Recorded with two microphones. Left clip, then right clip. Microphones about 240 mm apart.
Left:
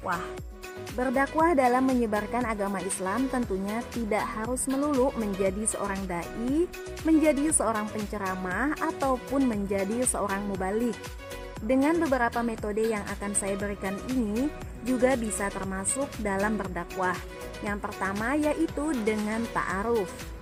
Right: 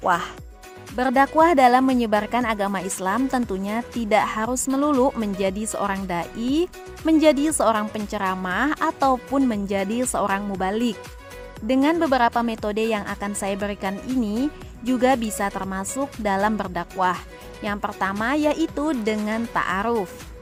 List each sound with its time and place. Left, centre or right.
0.0 s speech: right
15.0 s a woman's voice: right